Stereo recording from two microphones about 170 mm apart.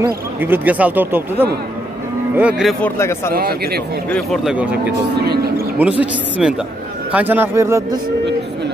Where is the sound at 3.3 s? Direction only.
65° right (ahead or behind).